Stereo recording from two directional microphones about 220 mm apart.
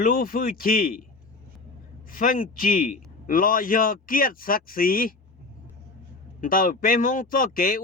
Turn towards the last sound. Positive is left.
turn(degrees=40)  # may be behind; listen again after turning